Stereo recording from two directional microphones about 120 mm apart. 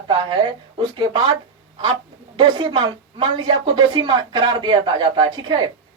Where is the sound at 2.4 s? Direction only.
45° right (ahead or behind).